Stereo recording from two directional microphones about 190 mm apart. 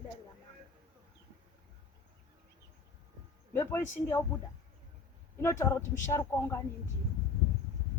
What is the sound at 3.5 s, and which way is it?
Speech, 10° left (ahead or behind).